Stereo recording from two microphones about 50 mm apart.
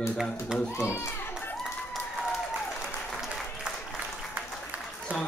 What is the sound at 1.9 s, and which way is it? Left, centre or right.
Applause, centre.